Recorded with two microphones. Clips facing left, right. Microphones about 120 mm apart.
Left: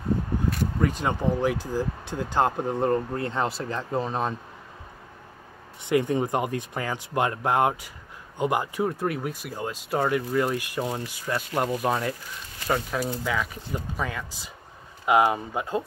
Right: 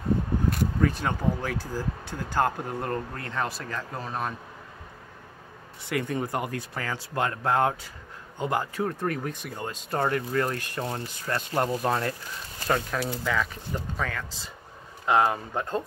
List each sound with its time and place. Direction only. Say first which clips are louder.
0.8 s speech: left 2 dB; 15° left (ahead or behind)
5.9 s speech: left 6 dB; 20° left (ahead or behind)